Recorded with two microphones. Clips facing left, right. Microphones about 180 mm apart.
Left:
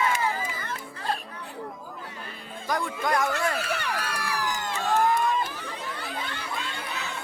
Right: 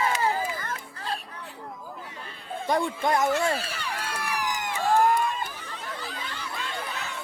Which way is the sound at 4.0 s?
25° right (ahead or behind).